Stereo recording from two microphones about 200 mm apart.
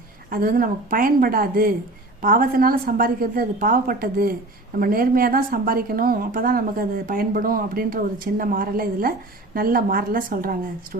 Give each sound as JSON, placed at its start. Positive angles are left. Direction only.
{"t": 0.3, "sound": "a woman's voice", "side_deg": -45}